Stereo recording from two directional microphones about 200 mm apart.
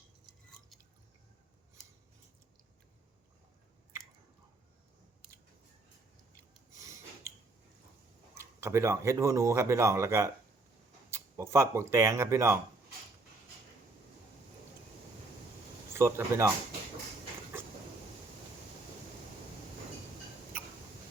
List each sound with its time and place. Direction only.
6.7 s snort: 15° right (ahead or behind)
8.4 s speech: 15° right (ahead or behind)
15.9 s speech: 15° right (ahead or behind)